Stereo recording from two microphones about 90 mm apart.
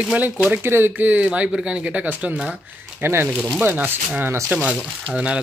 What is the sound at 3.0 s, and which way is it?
Speech, 25° right (ahead or behind).